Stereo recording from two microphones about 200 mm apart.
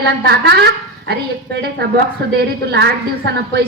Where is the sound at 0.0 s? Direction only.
55° right (ahead or behind).